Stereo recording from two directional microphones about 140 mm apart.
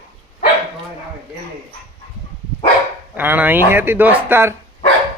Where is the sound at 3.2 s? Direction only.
15° right (ahead or behind).